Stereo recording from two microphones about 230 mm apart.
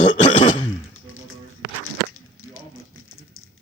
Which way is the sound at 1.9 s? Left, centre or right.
Left.